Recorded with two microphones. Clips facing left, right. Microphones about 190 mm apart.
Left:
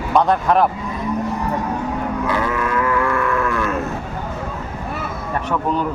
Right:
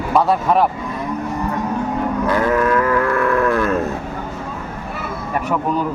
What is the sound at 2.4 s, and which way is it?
Livestock, 45° right (ahead or behind).